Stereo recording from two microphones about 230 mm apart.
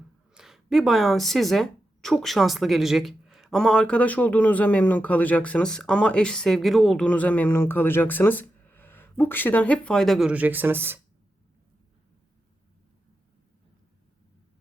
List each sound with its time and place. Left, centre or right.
0.3 s speech: centre